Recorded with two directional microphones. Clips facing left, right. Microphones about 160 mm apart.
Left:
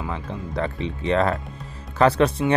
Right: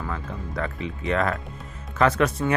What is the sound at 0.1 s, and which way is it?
Speech, 30° left (ahead or behind).